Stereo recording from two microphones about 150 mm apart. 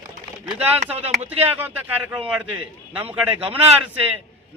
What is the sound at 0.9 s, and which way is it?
Speech, 45° right (ahead or behind).